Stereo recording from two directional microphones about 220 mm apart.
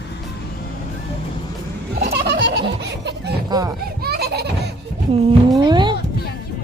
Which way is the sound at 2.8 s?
50° right (ahead or behind).